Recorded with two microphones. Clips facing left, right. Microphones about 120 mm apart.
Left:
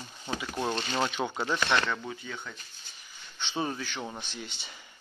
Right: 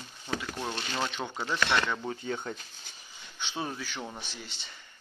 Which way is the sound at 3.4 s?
Centre (ahead or behind).